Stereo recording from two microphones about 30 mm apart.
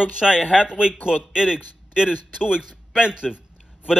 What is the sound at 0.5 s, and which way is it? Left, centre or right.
A man's voice, right.